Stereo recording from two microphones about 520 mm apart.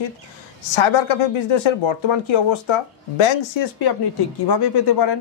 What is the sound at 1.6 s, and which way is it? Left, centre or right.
Speech, left.